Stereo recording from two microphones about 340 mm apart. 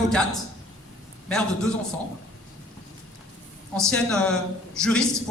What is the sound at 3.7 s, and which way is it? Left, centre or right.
A man's voice, centre.